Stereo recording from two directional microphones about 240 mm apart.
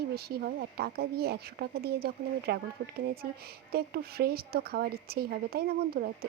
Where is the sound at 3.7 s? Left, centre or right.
Right.